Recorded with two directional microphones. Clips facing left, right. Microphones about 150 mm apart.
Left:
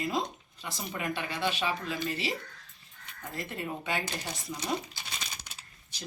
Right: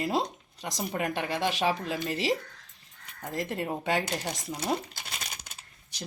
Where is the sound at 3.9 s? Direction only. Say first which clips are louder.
Right 7 dB; 85° right.